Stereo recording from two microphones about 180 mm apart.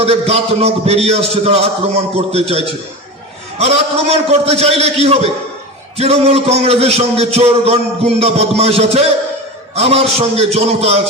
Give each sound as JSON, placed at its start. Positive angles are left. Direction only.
{"t": 0.0, "sound": "a man's voice", "side_deg": -35}